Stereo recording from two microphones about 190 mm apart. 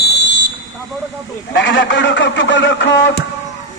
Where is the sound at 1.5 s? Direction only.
80° left.